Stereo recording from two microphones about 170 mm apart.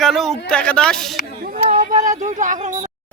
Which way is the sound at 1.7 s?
45° right (ahead or behind).